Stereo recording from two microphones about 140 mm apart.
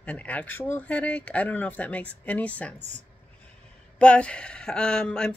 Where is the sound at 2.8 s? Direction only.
55° right (ahead or behind).